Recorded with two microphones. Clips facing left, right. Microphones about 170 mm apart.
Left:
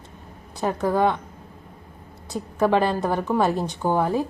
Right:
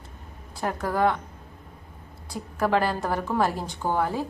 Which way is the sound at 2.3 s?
20° left (ahead or behind).